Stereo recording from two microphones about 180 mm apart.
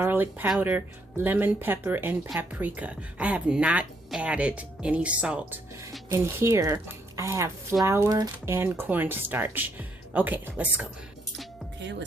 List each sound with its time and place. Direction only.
0.0 s speech: 10° right (ahead or behind)
11.8 s speech: 80° right